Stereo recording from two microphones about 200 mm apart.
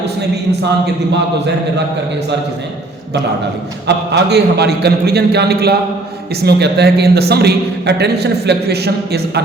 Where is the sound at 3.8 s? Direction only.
55° right (ahead or behind).